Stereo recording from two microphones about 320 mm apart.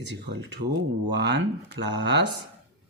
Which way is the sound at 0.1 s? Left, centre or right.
Right.